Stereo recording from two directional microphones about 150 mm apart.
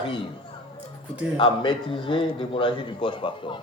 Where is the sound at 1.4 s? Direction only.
35° left (ahead or behind).